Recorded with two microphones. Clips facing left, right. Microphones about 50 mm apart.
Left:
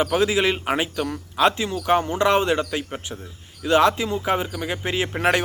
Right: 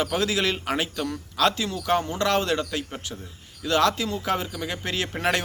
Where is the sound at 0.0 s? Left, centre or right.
Left.